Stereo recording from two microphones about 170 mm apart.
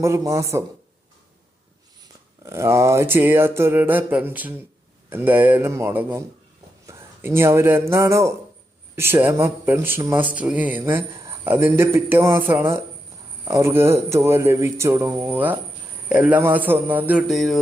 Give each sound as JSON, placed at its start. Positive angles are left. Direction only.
{"t": 0.0, "sound": "mantra", "side_deg": -20}
{"t": 2.4, "sound": "mantra", "side_deg": -15}
{"t": 6.8, "sound": "a man's voice", "side_deg": -15}
{"t": 9.0, "sound": "mantra", "side_deg": -15}